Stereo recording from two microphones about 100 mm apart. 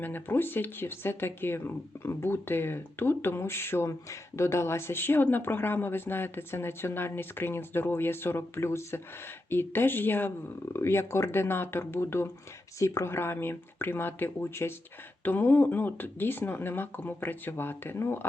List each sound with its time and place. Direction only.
0.0 s speech: 20° left (ahead or behind)